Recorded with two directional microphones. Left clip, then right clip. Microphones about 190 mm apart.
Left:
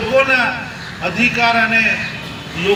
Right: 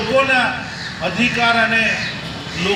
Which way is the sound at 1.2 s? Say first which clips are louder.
Left 2 dB; centre (ahead or behind).